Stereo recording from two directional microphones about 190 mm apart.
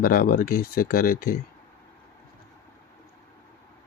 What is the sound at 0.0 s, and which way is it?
Speech, 50° left (ahead or behind).